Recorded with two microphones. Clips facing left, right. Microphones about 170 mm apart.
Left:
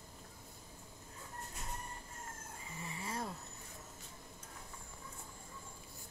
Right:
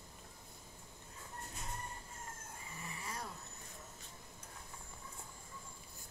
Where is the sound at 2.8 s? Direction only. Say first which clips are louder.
Left 5 dB; 25° left (ahead or behind).